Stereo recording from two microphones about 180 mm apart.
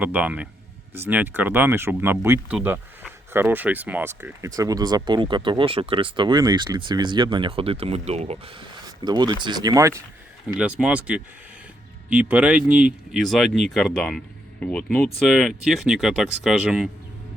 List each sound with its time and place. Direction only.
0.0 s speech: 10° right (ahead or behind); by 8.4 s 35° right (ahead or behind)
9.0 s speech: 25° right (ahead or behind)
10.6 s speech: 5° right (ahead or behind)